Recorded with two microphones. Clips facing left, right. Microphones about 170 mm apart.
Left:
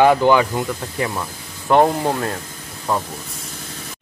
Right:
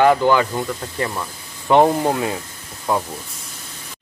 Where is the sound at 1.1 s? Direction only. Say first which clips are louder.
Left 1 dB; centre (ahead or behind).